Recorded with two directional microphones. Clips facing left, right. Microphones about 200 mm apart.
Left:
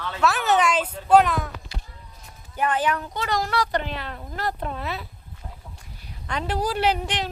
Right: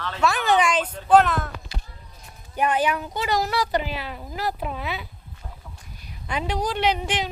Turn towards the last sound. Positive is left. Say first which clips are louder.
# even
turn(degrees=0)  # may be behind; listen again after turning